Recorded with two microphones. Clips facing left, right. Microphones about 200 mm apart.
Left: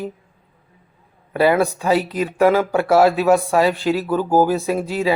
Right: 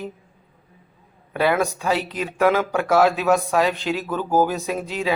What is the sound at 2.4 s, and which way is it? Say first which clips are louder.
Speech: left 3 dB; 10° left (ahead or behind).